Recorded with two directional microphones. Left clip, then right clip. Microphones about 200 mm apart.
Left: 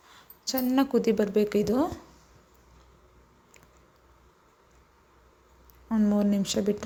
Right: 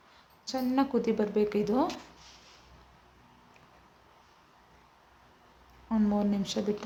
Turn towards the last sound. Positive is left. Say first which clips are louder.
# left 4 dB
turn(degrees=15)  # may be behind; listen again after turning